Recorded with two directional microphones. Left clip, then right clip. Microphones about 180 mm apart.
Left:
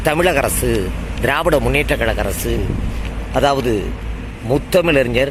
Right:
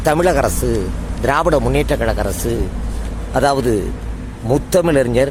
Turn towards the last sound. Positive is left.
turn(degrees=-15)  # may be behind; listen again after turning